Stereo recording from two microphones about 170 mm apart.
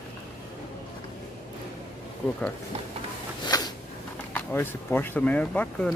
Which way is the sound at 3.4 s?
20° left (ahead or behind).